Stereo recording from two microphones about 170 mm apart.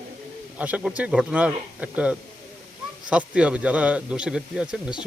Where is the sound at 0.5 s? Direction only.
10° right (ahead or behind).